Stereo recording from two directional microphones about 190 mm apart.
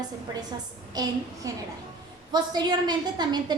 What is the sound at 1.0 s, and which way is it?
A woman's voice, 20° right (ahead or behind).